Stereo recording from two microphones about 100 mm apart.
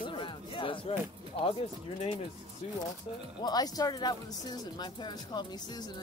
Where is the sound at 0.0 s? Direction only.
55° left (ahead or behind).